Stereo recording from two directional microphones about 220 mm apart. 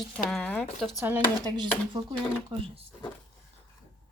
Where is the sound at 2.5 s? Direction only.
25° right (ahead or behind).